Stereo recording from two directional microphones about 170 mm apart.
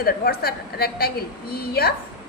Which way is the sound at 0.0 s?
65° left (ahead or behind).